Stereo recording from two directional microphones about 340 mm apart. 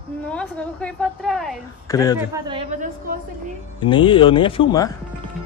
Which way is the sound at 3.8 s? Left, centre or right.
Centre.